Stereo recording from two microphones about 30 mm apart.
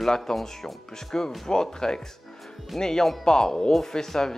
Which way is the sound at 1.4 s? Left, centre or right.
Left.